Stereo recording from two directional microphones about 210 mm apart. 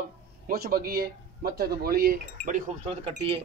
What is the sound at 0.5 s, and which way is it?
A man's voice, 45° right (ahead or behind).